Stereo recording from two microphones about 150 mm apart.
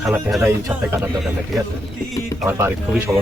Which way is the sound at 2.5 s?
15° right (ahead or behind).